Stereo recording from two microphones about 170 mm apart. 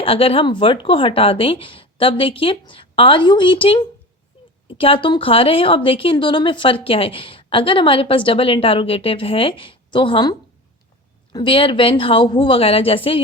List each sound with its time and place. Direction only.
0.0 s a woman's voice: 35° left (ahead or behind)